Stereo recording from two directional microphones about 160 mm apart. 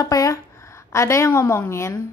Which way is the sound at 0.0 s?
20° left (ahead or behind).